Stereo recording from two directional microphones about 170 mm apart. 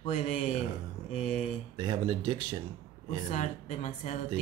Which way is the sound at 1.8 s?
25° right (ahead or behind).